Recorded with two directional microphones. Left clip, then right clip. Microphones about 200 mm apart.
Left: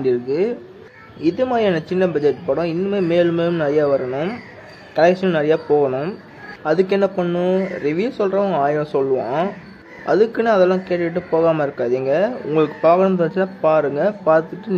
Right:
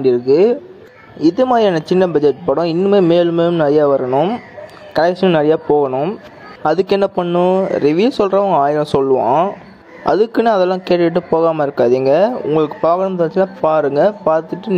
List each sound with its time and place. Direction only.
0.0 s a man's voice: 30° right (ahead or behind)
12.4 s a man's voice: 15° right (ahead or behind)
13.6 s a man's voice: 25° right (ahead or behind)